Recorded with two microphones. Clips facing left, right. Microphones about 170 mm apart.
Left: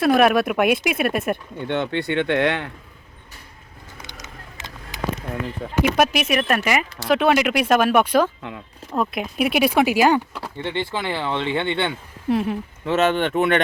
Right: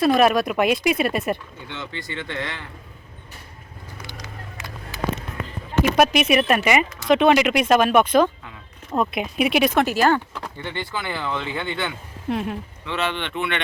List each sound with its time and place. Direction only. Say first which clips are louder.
0.0 s speech: left 1 dB; centre (ahead or behind)
1.6 s speech: left 12 dB; 60° left (ahead or behind)
4.0 s vehicle: right 3 dB; 20° left (ahead or behind)
6.0 s speech: right 4 dB; centre (ahead or behind)
10.6 s speech: left 5 dB; 25° left (ahead or behind)
12.3 s speech: left 4 dB; centre (ahead or behind)
12.8 s speech: left 8 dB; 45° left (ahead or behind)